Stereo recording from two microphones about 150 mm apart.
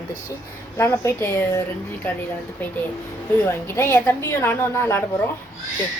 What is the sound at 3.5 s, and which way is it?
A woman's voice, 15° left (ahead or behind).